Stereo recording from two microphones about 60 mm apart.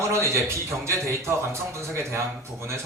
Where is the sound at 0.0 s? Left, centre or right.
Right.